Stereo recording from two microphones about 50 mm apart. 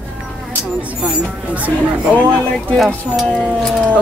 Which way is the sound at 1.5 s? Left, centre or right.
Right.